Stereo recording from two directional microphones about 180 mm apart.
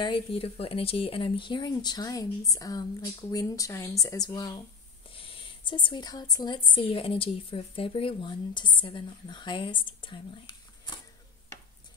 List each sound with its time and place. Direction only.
0.0 s speech: 30° left (ahead or behind)